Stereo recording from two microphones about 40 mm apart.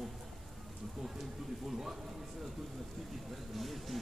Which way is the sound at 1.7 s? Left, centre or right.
Centre.